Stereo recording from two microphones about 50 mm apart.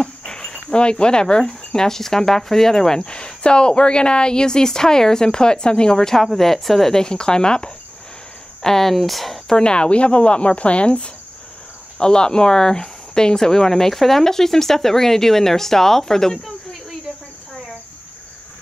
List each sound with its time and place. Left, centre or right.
0.0 s a woman's voice: centre
9.6 s a woman's voice: centre